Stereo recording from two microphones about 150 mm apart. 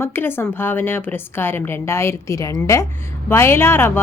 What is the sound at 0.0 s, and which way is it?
A woman's voice, 15° left (ahead or behind).